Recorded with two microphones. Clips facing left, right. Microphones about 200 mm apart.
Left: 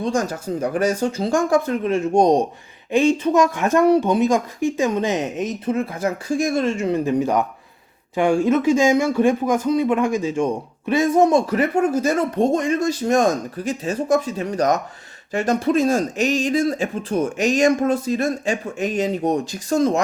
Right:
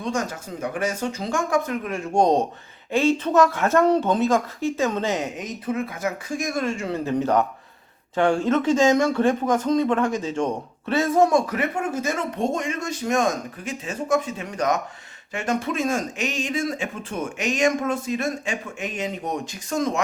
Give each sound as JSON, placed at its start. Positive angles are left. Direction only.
{"t": 0.0, "sound": "speech", "side_deg": 35}
{"t": 2.1, "sound": "speech", "side_deg": 15}